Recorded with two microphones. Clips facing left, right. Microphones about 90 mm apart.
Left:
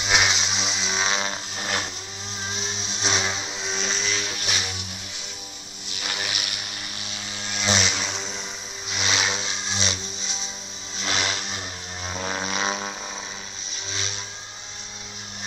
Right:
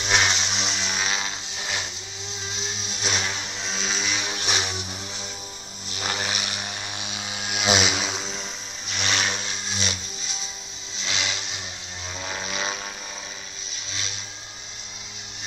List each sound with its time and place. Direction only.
0.0 s music: 10° left (ahead or behind)
1.0 s vehicle: 30° left (ahead or behind)
2.5 s vehicle: 35° left (ahead or behind)
3.6 s vehicle: centre (ahead or behind)
4.2 s vehicle: 25° right (ahead or behind)
6.0 s vehicle: 35° right (ahead or behind); by 8.4 s centre (ahead or behind)
8.9 s vehicle: 15° left (ahead or behind)
11.0 s vehicle: 45° left (ahead or behind)
12.2 s a sound: 35° left (ahead or behind)